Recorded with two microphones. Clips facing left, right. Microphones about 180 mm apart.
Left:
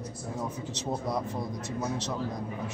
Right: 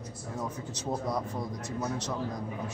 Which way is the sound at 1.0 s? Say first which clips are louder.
Left 1 dB; 10° left (ahead or behind).